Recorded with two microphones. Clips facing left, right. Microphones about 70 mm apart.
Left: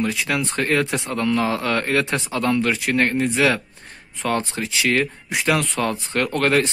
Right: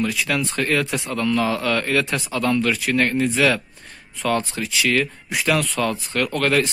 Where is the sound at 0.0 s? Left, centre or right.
Left.